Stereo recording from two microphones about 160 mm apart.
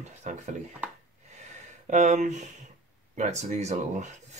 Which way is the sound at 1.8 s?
45° right (ahead or behind).